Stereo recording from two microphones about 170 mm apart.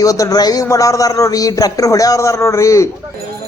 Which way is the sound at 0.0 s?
20° left (ahead or behind).